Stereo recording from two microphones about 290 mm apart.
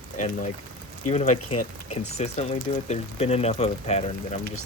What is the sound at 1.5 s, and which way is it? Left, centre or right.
Speech, left.